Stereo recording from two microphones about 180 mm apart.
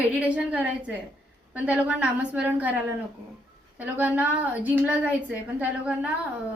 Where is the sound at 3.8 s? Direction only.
10° right (ahead or behind).